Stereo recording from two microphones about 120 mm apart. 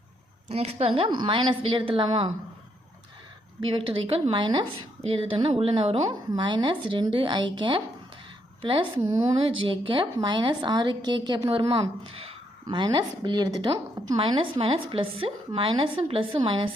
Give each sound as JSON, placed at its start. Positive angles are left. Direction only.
{"t": 0.4, "sound": "a woman's voice", "side_deg": -60}
{"t": 3.7, "sound": "a woman's voice", "side_deg": -50}
{"t": 9.0, "sound": "a woman's voice", "side_deg": -30}